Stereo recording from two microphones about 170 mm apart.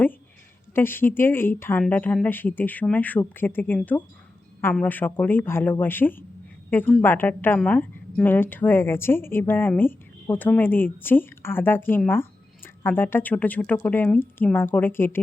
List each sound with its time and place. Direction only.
0.7 s a woman's voice: 15° left (ahead or behind)